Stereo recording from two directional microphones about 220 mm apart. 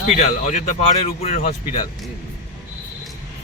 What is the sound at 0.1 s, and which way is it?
Speech, 30° left (ahead or behind).